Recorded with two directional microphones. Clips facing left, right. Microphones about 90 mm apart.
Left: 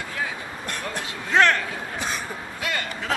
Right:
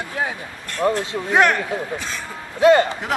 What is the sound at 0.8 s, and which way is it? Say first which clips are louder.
Speech: right 14 dB; 35° right (ahead or behind).